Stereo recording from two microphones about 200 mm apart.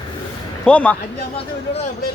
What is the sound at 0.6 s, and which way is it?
Speech, 5° left (ahead or behind).